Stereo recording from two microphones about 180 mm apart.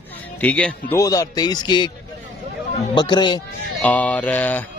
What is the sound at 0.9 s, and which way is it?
Speech, 20° left (ahead or behind).